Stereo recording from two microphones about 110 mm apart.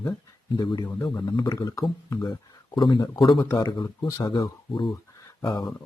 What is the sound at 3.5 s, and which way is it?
Speech, 40° left (ahead or behind).